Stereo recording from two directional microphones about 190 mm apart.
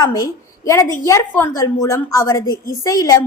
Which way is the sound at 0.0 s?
20° left (ahead or behind).